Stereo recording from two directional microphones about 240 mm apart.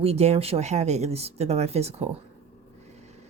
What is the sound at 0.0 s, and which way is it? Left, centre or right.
A woman's voice, right.